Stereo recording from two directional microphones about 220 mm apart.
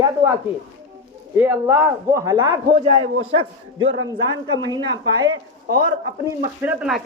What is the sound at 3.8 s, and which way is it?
Speech, 60° right (ahead or behind).